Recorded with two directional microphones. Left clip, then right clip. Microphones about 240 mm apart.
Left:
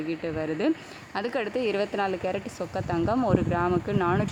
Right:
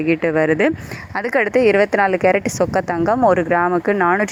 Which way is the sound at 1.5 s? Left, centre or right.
Centre.